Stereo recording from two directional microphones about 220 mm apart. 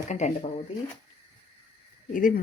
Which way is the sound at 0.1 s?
30° left (ahead or behind).